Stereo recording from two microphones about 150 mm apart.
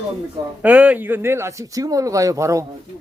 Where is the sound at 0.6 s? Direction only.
10° right (ahead or behind).